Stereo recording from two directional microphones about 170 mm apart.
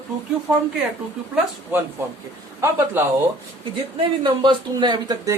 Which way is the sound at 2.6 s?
15° right (ahead or behind).